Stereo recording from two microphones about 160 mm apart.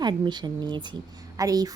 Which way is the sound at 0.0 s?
25° right (ahead or behind).